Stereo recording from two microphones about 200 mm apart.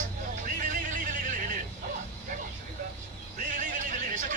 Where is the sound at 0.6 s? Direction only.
40° right (ahead or behind).